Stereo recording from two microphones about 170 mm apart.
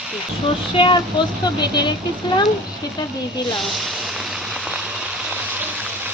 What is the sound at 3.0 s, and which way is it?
Speech, 25° left (ahead or behind).